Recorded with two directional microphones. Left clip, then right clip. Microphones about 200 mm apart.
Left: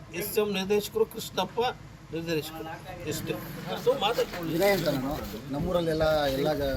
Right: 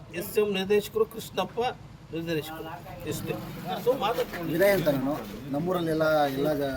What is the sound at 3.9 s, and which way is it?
Speech, 15° left (ahead or behind).